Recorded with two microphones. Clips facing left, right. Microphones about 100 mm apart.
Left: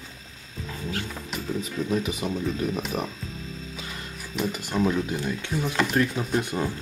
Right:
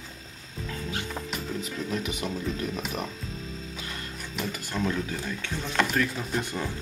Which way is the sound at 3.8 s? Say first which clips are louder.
Even; 5° left (ahead or behind).